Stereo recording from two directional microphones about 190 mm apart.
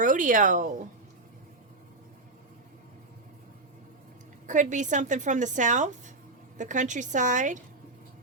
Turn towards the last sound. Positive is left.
turn(degrees=-40)  # may be behind; listen again after turning